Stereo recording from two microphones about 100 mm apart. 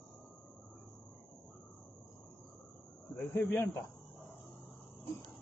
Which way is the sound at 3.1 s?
20° left (ahead or behind).